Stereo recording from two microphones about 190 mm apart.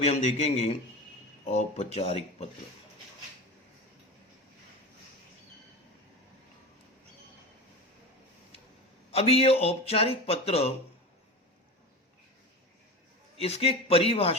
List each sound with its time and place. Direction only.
0.0 s speech: 35° left (ahead or behind)
9.1 s speech: 30° left (ahead or behind)
13.4 s speech: 30° left (ahead or behind)